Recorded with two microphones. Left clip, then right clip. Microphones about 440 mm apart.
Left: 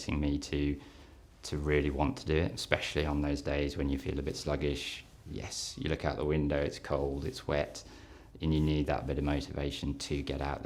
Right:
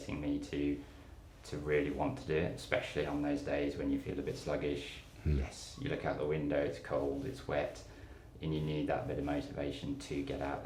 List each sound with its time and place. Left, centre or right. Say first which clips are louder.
0.1 s speech: left 4 dB; left